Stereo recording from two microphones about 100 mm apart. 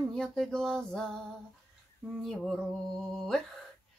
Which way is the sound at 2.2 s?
Centre (ahead or behind).